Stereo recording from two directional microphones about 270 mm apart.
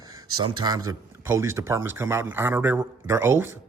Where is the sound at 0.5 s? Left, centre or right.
Centre.